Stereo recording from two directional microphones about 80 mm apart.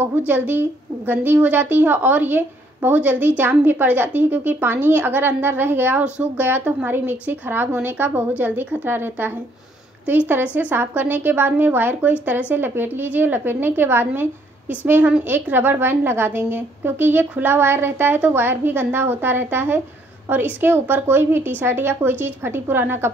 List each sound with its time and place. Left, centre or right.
0.3 s a woman's voice: right